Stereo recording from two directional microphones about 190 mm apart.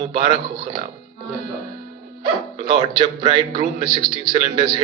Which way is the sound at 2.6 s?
25° right (ahead or behind).